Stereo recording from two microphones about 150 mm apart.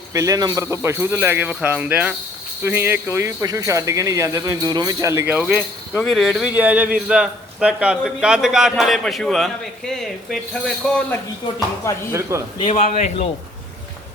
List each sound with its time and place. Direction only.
0.1 s speech: 20° right (ahead or behind)
5.3 s a man's voice: 5° right (ahead or behind)
11.9 s speech: 20° left (ahead or behind)
12.3 s speech: 20° right (ahead or behind)
12.7 s a man's voice: 50° left (ahead or behind)